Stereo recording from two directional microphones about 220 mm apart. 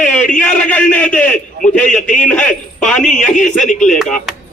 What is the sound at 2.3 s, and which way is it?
Speech, 5° left (ahead or behind).